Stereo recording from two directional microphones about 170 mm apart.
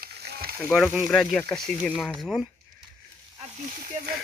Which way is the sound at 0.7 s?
5° right (ahead or behind).